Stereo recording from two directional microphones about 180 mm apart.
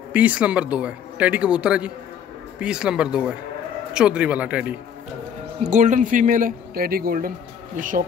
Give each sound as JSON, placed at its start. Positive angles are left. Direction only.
{"t": 0.1, "sound": "speech", "side_deg": -5}
{"t": 5.6, "sound": "speech", "side_deg": -45}